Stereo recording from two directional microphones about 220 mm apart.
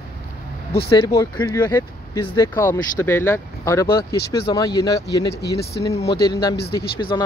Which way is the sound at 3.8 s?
45° left (ahead or behind).